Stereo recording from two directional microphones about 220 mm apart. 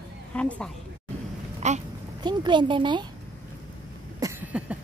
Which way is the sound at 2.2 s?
20° right (ahead or behind).